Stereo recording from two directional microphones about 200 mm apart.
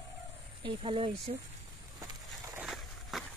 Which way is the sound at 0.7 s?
25° right (ahead or behind).